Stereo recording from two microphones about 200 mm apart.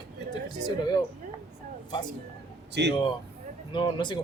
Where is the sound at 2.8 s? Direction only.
60° right (ahead or behind).